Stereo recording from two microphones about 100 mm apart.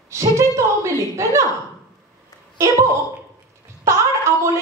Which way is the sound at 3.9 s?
30° right (ahead or behind).